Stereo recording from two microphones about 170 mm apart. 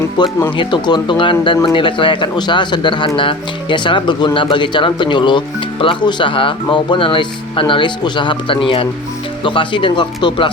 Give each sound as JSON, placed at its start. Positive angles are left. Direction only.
{"t": 0.2, "sound": "speech", "side_deg": 25}